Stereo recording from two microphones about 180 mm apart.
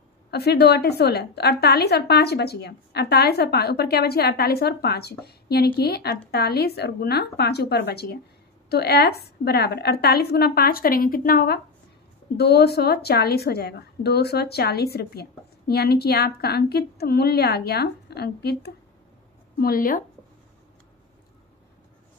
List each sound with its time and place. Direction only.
0.3 s a woman's voice: 65° left (ahead or behind)
19.6 s speech: 50° left (ahead or behind)